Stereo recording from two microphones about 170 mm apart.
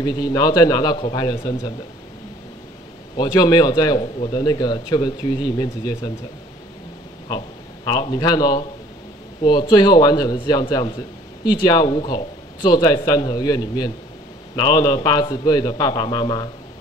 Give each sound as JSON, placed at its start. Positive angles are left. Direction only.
{"t": 0.0, "sound": "a man's voice", "side_deg": 25}
{"t": 3.2, "sound": "a man's voice", "side_deg": 25}
{"t": 7.2, "sound": "a man's voice", "side_deg": 25}